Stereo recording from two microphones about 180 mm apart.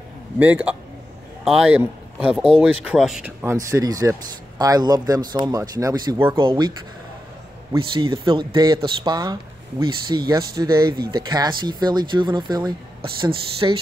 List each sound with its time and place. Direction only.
0.4 s a man's voice: 10° right (ahead or behind)
6.3 s speech: 25° right (ahead or behind)
7.7 s speech: 30° right (ahead or behind)